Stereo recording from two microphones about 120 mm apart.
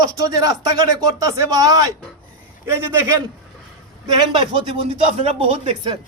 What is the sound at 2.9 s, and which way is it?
Speech, 20° right (ahead or behind).